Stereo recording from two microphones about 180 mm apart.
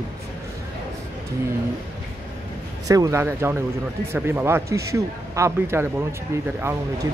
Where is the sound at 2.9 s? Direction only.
20° right (ahead or behind).